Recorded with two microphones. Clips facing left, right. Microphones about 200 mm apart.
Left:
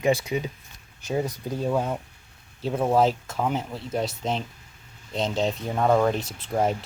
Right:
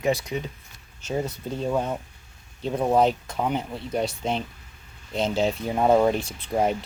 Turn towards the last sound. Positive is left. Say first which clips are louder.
# right 1 dB
turn(degrees=0)  # may be behind; listen again after turning